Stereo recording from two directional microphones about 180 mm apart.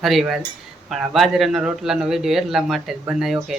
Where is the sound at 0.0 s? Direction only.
Centre (ahead or behind).